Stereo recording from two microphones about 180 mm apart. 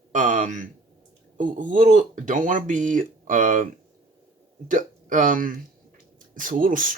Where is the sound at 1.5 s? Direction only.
45° right (ahead or behind).